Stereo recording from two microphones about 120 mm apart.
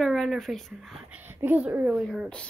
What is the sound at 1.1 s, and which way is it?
A woman's voice, 20° right (ahead or behind).